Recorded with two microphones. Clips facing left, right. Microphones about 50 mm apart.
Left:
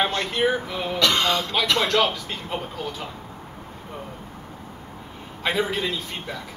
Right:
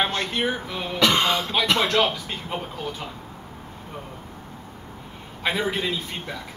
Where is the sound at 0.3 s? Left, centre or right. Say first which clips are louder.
Left 3 dB; centre.